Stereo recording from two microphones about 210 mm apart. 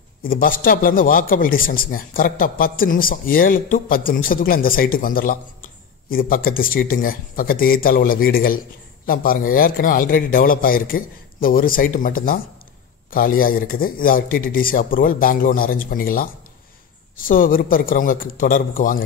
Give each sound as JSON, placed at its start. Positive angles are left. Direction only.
{"t": 0.2, "sound": "a man's voice", "side_deg": 40}